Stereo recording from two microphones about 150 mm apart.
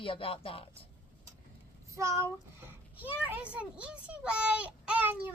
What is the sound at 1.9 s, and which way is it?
Speech, 20° right (ahead or behind).